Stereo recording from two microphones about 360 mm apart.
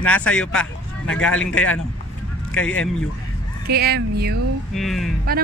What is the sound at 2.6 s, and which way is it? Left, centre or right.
Speech, left.